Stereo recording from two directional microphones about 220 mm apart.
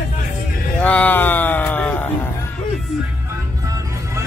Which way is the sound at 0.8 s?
5° left (ahead or behind).